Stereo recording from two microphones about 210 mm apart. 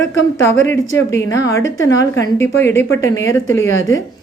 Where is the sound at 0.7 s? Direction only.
15° left (ahead or behind).